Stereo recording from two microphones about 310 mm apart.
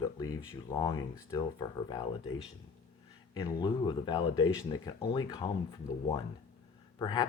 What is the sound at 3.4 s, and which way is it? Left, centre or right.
Speech, centre.